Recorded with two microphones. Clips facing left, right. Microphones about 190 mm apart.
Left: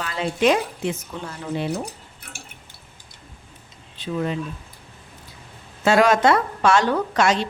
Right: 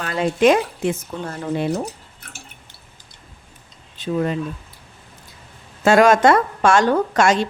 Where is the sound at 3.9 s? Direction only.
45° right (ahead or behind).